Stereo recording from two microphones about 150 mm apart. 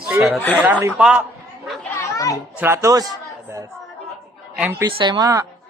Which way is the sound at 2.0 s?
20° left (ahead or behind).